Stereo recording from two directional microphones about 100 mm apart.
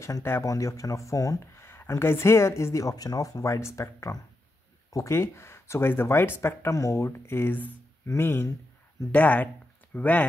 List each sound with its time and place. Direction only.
0.0 s speech: 25° left (ahead or behind)